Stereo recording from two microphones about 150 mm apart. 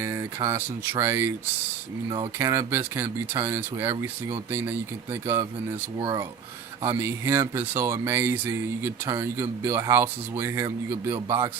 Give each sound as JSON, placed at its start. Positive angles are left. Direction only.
{"t": 0.0, "sound": "a sound", "side_deg": -15}
{"t": 0.5, "sound": "speech", "side_deg": -15}
{"t": 2.4, "sound": "speech", "side_deg": -20}
{"t": 5.2, "sound": "speech", "side_deg": -20}
{"t": 6.8, "sound": "speech", "side_deg": -15}